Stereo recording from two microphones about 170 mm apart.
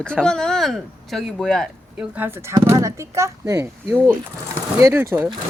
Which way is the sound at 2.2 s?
15° right (ahead or behind).